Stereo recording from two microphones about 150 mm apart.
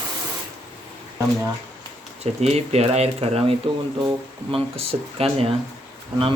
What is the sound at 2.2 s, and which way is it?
Speech, 45° right (ahead or behind).